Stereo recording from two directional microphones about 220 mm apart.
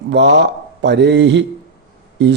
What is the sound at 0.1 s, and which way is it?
Speech, 50° right (ahead or behind).